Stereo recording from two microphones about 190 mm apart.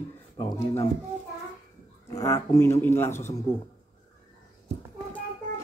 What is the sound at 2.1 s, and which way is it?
Speech, 20° left (ahead or behind).